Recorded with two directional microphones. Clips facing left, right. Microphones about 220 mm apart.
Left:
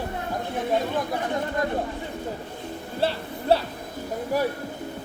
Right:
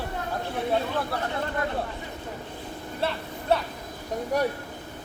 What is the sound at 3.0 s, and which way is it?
Speech, 30° left (ahead or behind).